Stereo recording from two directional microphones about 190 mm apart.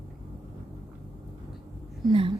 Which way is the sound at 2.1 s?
30° right (ahead or behind).